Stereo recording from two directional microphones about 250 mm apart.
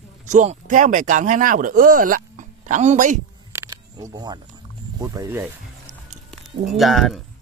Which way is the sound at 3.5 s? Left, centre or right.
Centre.